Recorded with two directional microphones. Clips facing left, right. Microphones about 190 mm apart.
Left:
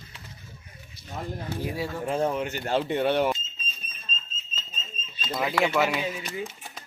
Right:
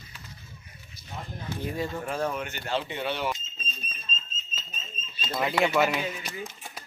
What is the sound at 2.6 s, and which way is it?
Speech, 50° left (ahead or behind).